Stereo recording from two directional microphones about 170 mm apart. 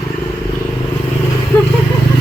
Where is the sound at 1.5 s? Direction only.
15° left (ahead or behind).